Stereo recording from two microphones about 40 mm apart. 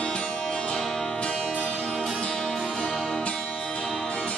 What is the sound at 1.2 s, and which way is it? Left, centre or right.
Music, left.